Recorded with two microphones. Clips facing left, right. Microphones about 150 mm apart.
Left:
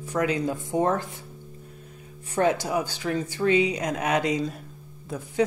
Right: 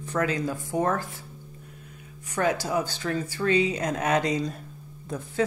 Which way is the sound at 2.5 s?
15° left (ahead or behind).